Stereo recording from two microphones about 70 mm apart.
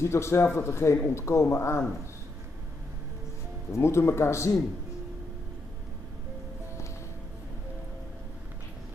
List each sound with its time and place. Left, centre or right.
0.0 s a man's voice: left
3.7 s a man's voice: left